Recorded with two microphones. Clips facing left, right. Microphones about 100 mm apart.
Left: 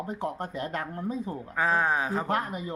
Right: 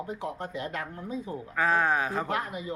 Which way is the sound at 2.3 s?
40° left (ahead or behind).